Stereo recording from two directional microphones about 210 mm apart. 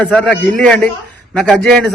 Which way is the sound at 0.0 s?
5° left (ahead or behind).